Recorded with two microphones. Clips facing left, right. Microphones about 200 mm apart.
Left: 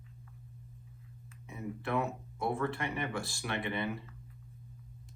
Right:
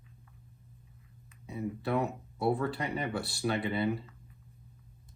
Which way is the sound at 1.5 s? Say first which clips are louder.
Right 4 dB; 35° right (ahead or behind).